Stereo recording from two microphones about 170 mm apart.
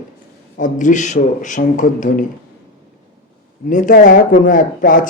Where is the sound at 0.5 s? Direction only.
50° left (ahead or behind).